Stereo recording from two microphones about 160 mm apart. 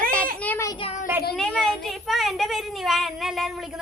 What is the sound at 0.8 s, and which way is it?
Child singing, 40° left (ahead or behind).